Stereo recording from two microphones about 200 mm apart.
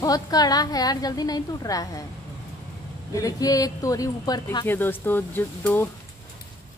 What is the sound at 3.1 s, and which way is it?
Speech, 15° left (ahead or behind).